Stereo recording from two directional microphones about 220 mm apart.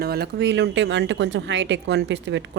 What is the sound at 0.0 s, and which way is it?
A woman's voice, 45° right (ahead or behind).